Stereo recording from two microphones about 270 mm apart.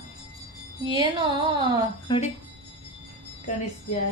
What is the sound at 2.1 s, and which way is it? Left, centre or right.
Speech, centre.